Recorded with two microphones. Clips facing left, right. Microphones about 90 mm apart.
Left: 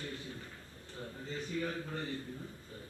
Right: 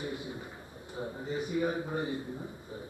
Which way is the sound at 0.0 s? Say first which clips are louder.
Right 6 dB; 15° right (ahead or behind).